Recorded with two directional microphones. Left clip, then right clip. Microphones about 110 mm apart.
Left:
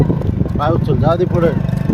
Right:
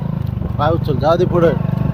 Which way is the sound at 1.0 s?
5° left (ahead or behind).